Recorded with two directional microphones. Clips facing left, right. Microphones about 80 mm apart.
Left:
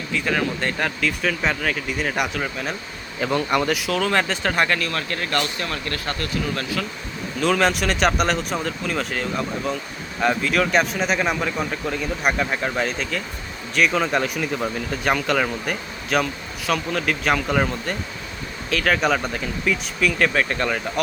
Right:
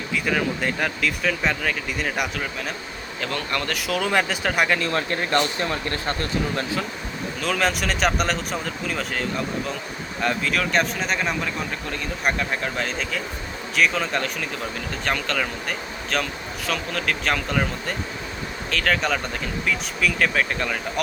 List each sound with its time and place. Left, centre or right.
0.1 s speech: centre
3.2 s speech: centre
3.8 s speech: centre
4.8 s speech: right
7.3 s speech: centre